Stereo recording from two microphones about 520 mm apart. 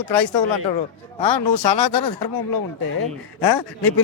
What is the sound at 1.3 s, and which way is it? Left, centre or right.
Speech, left.